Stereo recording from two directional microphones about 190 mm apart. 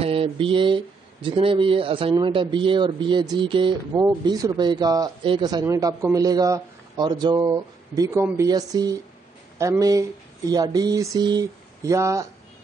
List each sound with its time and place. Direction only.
0.0 s speech: 30° right (ahead or behind)